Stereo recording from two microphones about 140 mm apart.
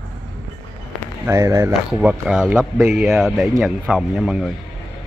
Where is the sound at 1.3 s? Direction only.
25° right (ahead or behind).